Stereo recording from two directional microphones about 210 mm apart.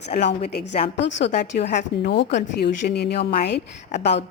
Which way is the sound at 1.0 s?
55° left (ahead or behind).